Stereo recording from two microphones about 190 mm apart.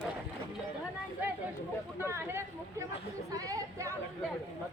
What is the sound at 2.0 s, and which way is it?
Speech, 10° right (ahead or behind).